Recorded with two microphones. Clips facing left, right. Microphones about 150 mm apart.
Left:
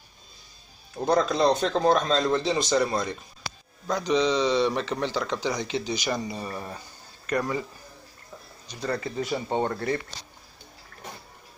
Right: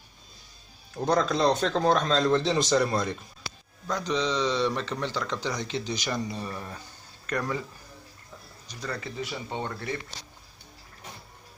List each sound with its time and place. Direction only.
1.0 s speech: 10° left (ahead or behind)
3.9 s speech: 15° left (ahead or behind)
8.6 s speech: 30° left (ahead or behind); by 9.9 s 45° left (ahead or behind)